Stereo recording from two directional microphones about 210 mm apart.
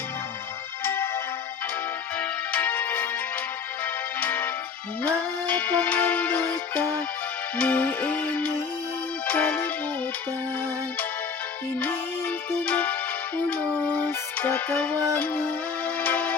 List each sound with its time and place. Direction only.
2.5 s music: 5° left (ahead or behind)
4.2 s music: 10° left (ahead or behind)
12.5 s music: 10° left (ahead or behind)
16.0 s music: 10° left (ahead or behind)